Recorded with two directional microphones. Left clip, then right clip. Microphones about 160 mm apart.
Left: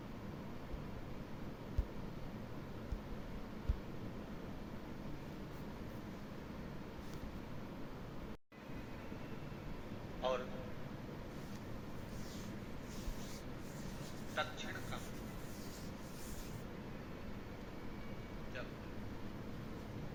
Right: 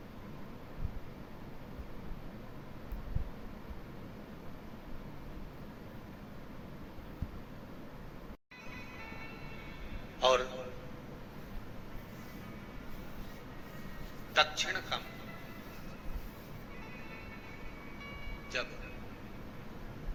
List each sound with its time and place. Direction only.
10.2 s a sound: 35° right (ahead or behind)
14.3 s a man's voice: 40° right (ahead or behind)
18.5 s vehicle: 35° right (ahead or behind)